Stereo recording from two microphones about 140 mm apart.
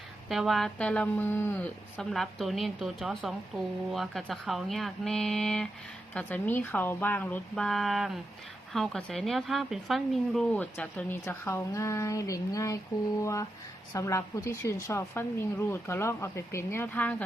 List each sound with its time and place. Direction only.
0.3 s a woman's voice: centre (ahead or behind)